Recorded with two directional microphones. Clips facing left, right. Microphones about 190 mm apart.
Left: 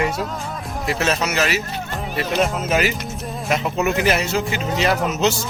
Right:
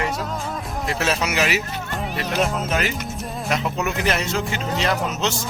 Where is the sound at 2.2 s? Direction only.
Centre (ahead or behind).